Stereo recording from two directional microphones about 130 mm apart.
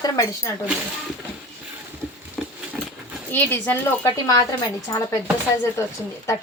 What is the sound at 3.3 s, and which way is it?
Speech, 15° left (ahead or behind).